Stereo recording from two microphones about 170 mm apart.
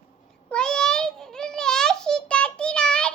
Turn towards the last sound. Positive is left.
turn(degrees=5)  # may be behind; listen again after turning